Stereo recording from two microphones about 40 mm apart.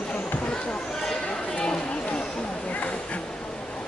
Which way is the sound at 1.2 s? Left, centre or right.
Left.